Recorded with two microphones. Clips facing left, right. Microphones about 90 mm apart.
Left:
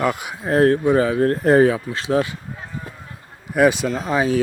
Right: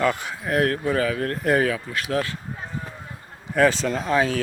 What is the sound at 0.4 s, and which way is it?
Speech, 30° left (ahead or behind).